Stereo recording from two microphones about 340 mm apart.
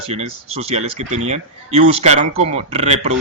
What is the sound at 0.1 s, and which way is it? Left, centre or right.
Speech, centre.